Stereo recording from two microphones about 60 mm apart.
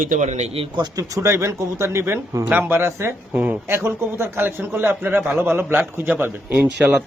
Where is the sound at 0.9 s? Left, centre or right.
Right.